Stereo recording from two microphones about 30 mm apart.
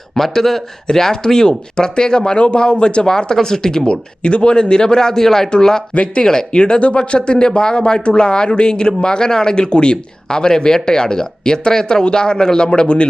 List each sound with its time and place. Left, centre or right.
0.2 s speech: centre
4.2 s speech: left
5.9 s speech: left
6.2 s speech: left